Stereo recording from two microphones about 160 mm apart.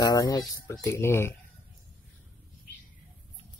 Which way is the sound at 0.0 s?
25° left (ahead or behind).